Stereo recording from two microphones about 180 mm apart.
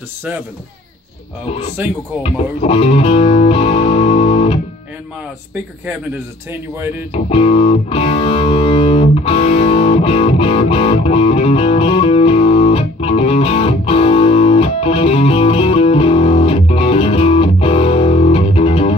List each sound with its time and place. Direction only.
1.8 s speech: 10° right (ahead or behind)
2.2 s speech: 35° left (ahead or behind)
6.5 s speech: 10° right (ahead or behind)
7.1 s music: 35° left (ahead or behind)